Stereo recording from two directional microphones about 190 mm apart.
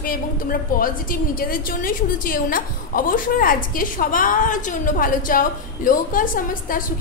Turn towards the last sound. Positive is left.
turn(degrees=45)  # may be behind; listen again after turning